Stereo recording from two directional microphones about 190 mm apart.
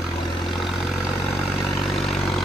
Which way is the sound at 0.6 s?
Centre (ahead or behind).